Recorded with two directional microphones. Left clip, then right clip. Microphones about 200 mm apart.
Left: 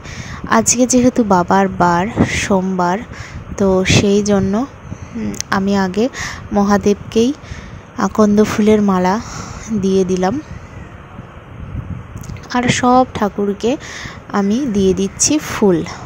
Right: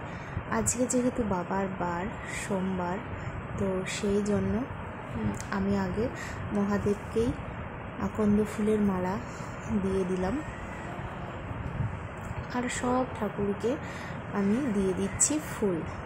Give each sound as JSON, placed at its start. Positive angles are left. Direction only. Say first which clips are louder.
{"t": 0.5, "sound": "speech", "louder": "left 17 dB", "side_deg": 40}
{"t": 5.5, "sound": "speech", "louder": "left 16 dB", "side_deg": 40}
{"t": 12.4, "sound": "speech", "louder": "left 17 dB", "side_deg": 40}